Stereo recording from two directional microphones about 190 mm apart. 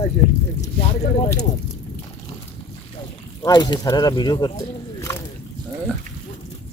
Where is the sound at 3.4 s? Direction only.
20° left (ahead or behind).